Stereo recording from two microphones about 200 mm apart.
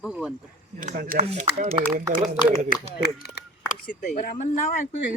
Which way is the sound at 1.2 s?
30° right (ahead or behind).